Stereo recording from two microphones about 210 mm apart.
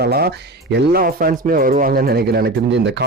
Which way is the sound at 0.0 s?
50° right (ahead or behind).